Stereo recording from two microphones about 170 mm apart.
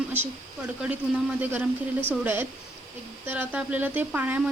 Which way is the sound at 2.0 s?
10° right (ahead or behind).